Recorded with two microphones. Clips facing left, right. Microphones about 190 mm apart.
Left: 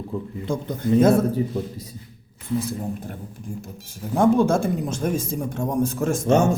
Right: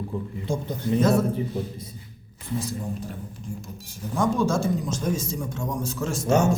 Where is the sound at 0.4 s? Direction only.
55° left (ahead or behind).